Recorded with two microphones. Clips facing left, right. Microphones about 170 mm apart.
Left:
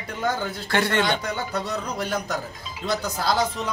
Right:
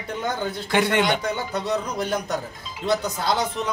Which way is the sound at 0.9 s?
15° right (ahead or behind).